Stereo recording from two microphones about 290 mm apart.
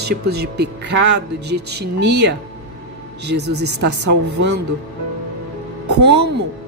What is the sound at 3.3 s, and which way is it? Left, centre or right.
Speech, right.